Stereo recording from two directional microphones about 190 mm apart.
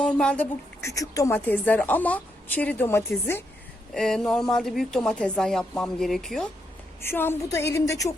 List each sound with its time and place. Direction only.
0.0 s speech: 5° left (ahead or behind)